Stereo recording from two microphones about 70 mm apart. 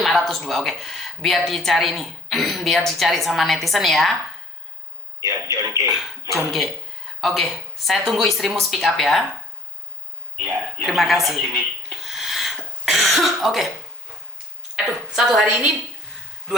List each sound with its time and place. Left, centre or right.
0.0 s speech: centre
5.2 s speech: left
5.9 s speech: centre
10.4 s speech: centre
12.0 s cough: centre
15.1 s a woman's voice: centre